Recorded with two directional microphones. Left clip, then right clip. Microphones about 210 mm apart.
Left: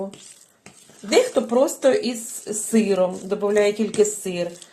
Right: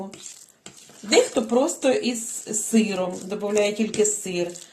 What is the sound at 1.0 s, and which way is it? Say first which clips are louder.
A woman's voice: left 1 dB; 25° left (ahead or behind).